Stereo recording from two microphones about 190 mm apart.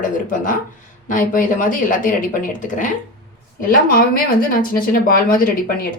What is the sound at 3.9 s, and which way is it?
A woman's voice, 50° left (ahead or behind).